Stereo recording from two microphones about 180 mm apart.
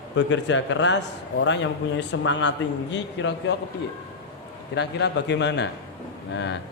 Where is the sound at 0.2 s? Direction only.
90° left.